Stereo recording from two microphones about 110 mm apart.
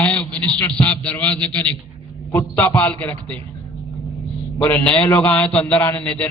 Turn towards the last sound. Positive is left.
turn(degrees=10)  # may be behind; listen again after turning